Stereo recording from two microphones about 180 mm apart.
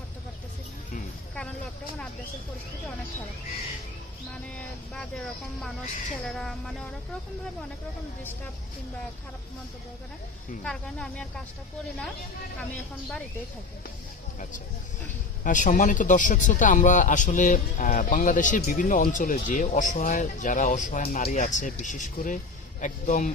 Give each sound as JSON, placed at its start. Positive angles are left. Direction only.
{"t": 4.5, "sound": "speech", "side_deg": 5}
{"t": 10.6, "sound": "speech", "side_deg": 5}
{"t": 12.5, "sound": "speech", "side_deg": 5}
{"t": 15.4, "sound": "speech", "side_deg": 45}